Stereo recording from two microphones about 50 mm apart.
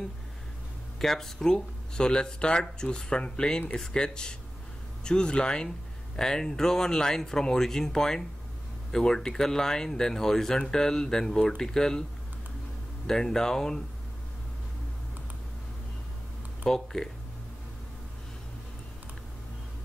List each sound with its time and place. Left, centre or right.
0.9 s speech: centre
13.0 s speech: centre
16.6 s speech: centre